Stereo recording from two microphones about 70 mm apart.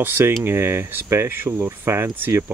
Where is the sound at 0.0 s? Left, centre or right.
Right.